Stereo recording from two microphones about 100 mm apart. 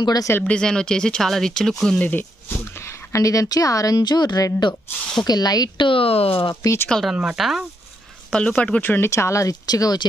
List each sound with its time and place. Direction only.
0.0 s speech: 40° left (ahead or behind)
0.4 s speech: 10° left (ahead or behind)
2.8 s speech: 30° left (ahead or behind)
5.9 s speech: 70° left (ahead or behind)
6.5 s speech: 30° left (ahead or behind)
6.9 s speech: centre (ahead or behind)
8.3 s speech: 10° left (ahead or behind); by 10.0 s 40° left (ahead or behind)